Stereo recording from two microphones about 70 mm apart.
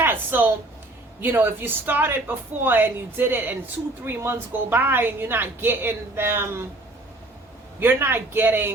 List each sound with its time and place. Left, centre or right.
0.0 s a sound: right
1.2 s a woman's voice: right
7.8 s a woman's voice: right